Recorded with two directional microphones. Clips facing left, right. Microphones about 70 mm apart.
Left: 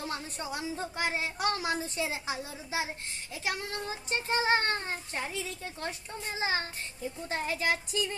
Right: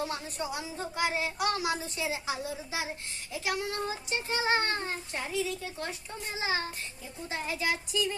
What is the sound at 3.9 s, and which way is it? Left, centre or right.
Child singing, left.